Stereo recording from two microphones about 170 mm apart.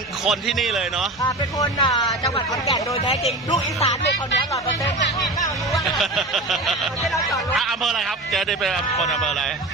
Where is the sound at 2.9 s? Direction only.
35° left (ahead or behind).